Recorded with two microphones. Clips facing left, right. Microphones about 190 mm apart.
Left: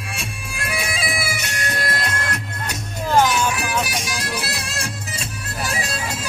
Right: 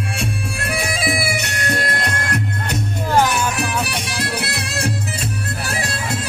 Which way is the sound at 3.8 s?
65° right (ahead or behind).